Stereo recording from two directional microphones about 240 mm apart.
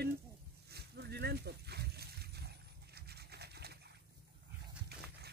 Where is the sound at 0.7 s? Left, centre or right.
Right.